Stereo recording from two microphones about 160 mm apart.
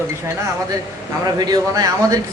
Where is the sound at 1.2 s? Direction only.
25° right (ahead or behind).